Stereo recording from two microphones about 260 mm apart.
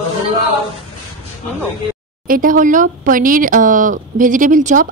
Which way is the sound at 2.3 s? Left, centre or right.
Right.